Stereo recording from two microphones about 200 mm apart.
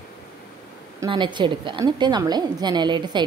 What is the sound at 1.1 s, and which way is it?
A woman's voice, 25° right (ahead or behind).